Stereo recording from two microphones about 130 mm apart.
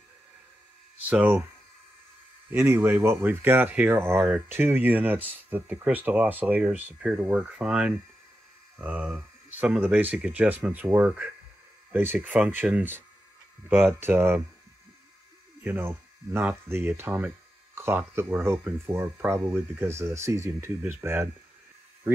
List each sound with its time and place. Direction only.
1.0 s speech: 15° right (ahead or behind)
2.5 s speech: 20° right (ahead or behind)
15.6 s speech: 15° right (ahead or behind)